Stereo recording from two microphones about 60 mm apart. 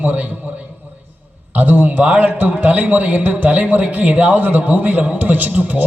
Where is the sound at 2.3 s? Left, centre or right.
Right.